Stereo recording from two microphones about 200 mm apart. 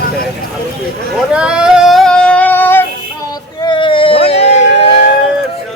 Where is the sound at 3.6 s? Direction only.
25° left (ahead or behind).